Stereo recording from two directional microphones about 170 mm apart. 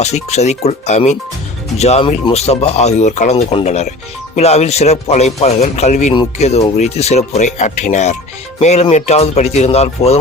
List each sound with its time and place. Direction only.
0.0 s speech: 40° left (ahead or behind)